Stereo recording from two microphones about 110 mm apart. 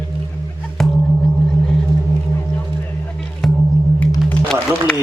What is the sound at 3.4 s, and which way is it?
Music, centre (ahead or behind).